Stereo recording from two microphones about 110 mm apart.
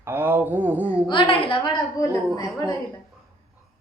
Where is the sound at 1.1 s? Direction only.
55° left (ahead or behind).